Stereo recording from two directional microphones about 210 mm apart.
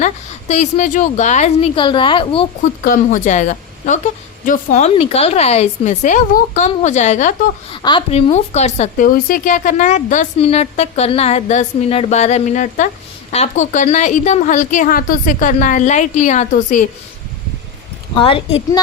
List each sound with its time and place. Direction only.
0.0 s a woman's voice: 35° left (ahead or behind)
2.8 s speech: 40° left (ahead or behind)
7.8 s speech: 20° left (ahead or behind)
18.1 s a woman's voice: 25° left (ahead or behind)